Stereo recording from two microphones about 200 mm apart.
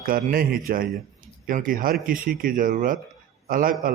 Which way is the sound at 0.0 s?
45° right (ahead or behind).